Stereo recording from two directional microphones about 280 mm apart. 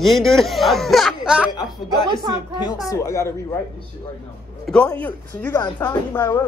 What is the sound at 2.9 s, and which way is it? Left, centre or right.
Speech, centre.